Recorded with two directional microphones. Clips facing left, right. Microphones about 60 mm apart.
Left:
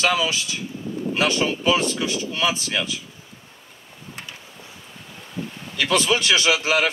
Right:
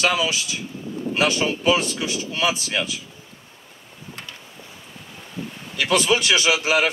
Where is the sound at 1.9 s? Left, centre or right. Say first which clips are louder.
Left 1 dB; centre.